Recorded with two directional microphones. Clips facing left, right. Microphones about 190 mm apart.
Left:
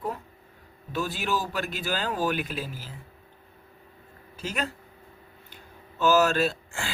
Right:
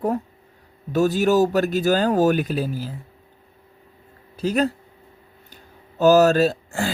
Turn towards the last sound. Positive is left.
turn(degrees=-40)  # may be behind; listen again after turning